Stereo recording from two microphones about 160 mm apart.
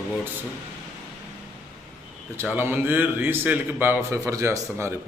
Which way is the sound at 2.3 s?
15° right (ahead or behind).